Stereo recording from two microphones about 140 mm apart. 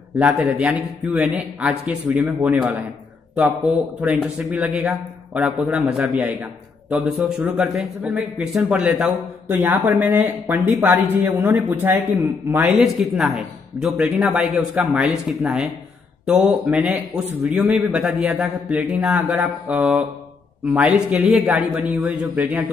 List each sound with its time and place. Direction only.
0.2 s a man's voice: 5° right (ahead or behind)
12.7 s a man's voice: 5° right (ahead or behind)